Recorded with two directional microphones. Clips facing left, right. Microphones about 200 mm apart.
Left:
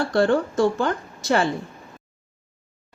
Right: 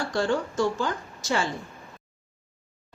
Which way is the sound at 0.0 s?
60° left (ahead or behind).